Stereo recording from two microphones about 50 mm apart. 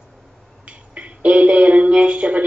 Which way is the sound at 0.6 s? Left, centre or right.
Right.